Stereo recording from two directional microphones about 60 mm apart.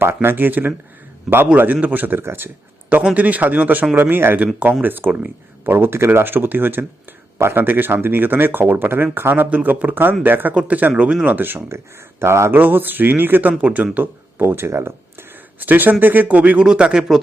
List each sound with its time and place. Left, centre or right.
0.0 s speech: right
3.2 s speech: right
11.3 s speech: right
12.2 s speech: right
12.5 s speech: right
14.4 s speech: right
15.6 s speech: right
16.3 s speech: right